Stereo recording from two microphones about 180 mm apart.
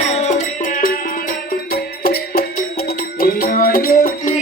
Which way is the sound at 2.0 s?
55° left (ahead or behind).